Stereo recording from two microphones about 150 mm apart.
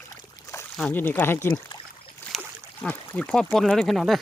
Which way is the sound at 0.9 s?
10° left (ahead or behind).